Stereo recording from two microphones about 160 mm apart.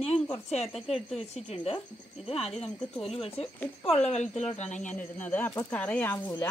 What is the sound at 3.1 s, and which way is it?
Speech, 40° left (ahead or behind).